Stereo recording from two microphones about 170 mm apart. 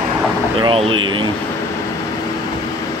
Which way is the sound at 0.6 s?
30° right (ahead or behind).